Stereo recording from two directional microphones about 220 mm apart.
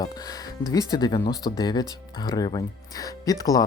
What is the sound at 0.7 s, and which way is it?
Speech, 15° left (ahead or behind).